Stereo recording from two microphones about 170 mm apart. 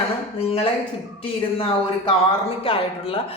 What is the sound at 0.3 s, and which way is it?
A man's voice, 35° left (ahead or behind).